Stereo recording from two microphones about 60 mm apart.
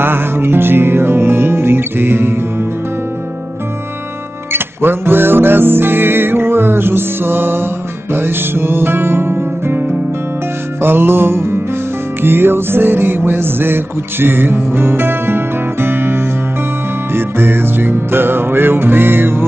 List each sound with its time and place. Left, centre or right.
0.0 s music: right
4.5 s music: right